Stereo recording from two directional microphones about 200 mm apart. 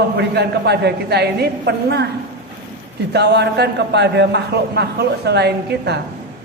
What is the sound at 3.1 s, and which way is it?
A man's voice, 55° right (ahead or behind).